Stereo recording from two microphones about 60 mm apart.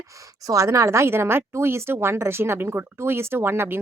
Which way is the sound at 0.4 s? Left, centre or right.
Right.